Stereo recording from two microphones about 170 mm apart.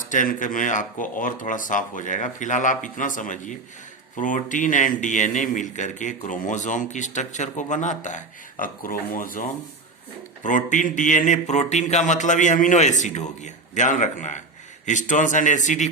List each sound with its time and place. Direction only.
0.0 s speech: 50° left (ahead or behind)